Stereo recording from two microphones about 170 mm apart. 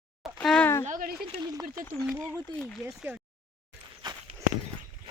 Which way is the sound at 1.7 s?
15° right (ahead or behind).